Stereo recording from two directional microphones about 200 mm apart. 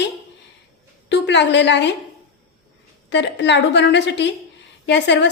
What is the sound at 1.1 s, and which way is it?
Speech, 60° left (ahead or behind).